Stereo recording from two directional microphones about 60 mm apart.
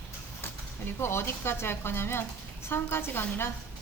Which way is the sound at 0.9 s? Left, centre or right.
Left.